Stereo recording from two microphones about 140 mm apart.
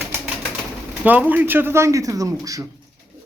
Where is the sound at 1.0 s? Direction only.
10° right (ahead or behind).